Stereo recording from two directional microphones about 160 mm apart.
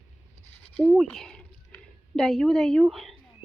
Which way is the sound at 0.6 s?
10° left (ahead or behind).